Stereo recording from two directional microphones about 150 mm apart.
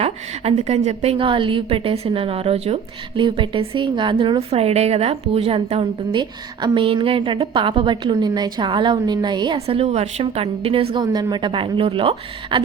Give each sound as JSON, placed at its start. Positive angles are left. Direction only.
{"t": 0.0, "sound": "a woman's voice", "side_deg": -45}
{"t": 10.9, "sound": "a woman's voice", "side_deg": -25}